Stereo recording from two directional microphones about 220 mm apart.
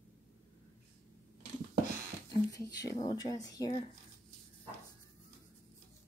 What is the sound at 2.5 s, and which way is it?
Speech, 15° left (ahead or behind).